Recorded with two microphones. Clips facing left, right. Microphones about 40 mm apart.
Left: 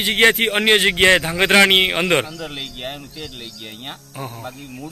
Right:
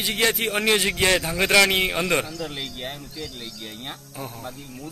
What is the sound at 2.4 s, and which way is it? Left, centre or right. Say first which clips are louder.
Speech: left 2 dB; left.